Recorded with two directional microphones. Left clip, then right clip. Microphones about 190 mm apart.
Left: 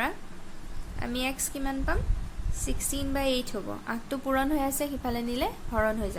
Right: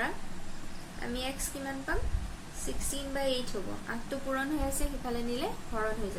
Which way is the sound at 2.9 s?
60° left (ahead or behind).